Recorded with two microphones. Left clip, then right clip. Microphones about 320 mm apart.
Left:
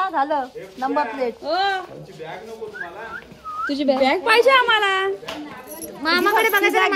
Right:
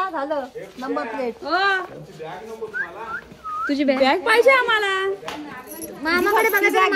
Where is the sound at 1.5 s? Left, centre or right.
Centre.